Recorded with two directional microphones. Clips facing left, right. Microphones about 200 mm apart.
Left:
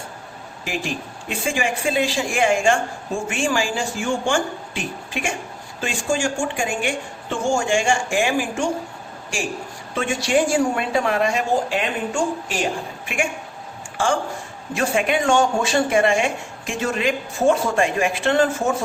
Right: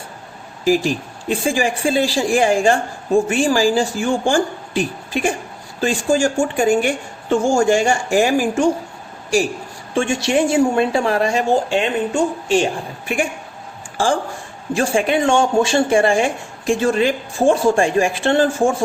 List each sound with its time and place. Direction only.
0.6 s speech: 35° right (ahead or behind)
9.9 s a woman's voice: 25° right (ahead or behind)
14.8 s speech: 30° right (ahead or behind)